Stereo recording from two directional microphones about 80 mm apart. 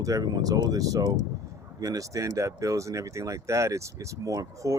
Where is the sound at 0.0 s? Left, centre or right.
Right.